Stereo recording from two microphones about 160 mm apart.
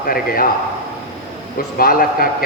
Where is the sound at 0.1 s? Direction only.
65° left (ahead or behind).